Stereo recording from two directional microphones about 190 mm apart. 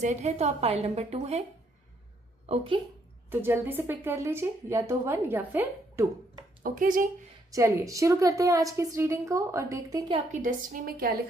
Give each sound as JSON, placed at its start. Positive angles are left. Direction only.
{"t": 0.0, "sound": "a woman's voice", "side_deg": -40}
{"t": 3.2, "sound": "speech", "side_deg": -10}
{"t": 6.6, "sound": "a woman's voice", "side_deg": -45}
{"t": 7.5, "sound": "speech", "side_deg": -15}
{"t": 10.3, "sound": "a woman's voice", "side_deg": -45}